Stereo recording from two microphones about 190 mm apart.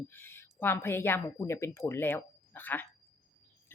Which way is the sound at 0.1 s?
10° left (ahead or behind).